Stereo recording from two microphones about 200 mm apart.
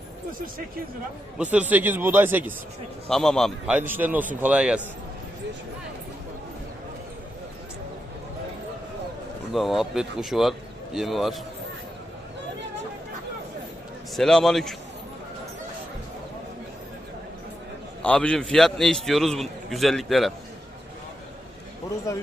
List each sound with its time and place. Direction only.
1.4 s a man's voice: 5° right (ahead or behind)
3.1 s a man's voice: centre (ahead or behind)
9.5 s a man's voice: centre (ahead or behind)
14.2 s a man's voice: centre (ahead or behind)
18.0 s a man's voice: 5° left (ahead or behind)
22.1 s speech: 15° left (ahead or behind)